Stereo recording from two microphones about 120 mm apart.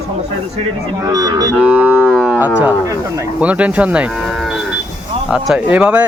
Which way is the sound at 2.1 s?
Centre (ahead or behind).